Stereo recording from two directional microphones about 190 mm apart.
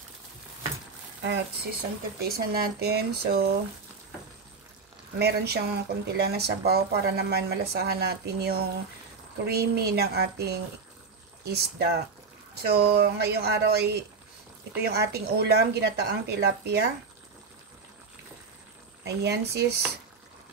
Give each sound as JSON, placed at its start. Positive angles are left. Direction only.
{"t": 1.2, "sound": "speech", "side_deg": -60}
{"t": 5.2, "sound": "speech", "side_deg": -60}
{"t": 19.0, "sound": "speech", "side_deg": -60}